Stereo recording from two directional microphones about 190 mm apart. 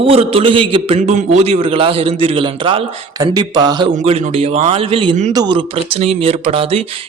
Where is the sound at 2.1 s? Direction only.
30° right (ahead or behind).